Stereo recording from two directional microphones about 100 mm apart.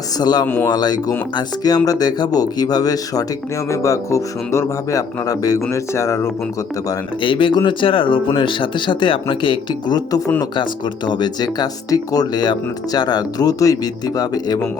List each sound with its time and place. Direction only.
0.2 s speech: 45° left (ahead or behind); by 6.3 s 30° left (ahead or behind)
7.2 s speech: 55° left (ahead or behind)